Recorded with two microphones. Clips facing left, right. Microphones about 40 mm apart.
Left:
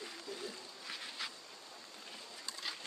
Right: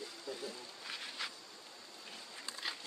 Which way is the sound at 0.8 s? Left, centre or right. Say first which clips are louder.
Right 1 dB; centre.